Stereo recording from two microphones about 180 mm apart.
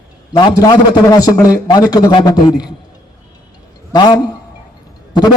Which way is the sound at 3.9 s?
25° left (ahead or behind).